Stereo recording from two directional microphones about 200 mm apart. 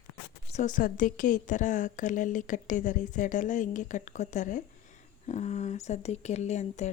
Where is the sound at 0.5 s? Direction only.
40° left (ahead or behind).